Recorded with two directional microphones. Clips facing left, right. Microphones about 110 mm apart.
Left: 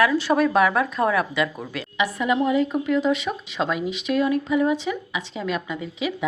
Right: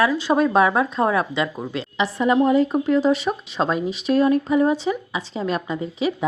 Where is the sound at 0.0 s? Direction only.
20° right (ahead or behind).